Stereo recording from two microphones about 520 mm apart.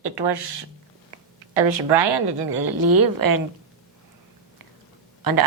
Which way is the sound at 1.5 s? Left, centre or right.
Right.